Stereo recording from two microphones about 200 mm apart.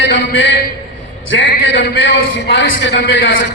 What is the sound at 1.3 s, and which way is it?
A man's voice, 65° left (ahead or behind).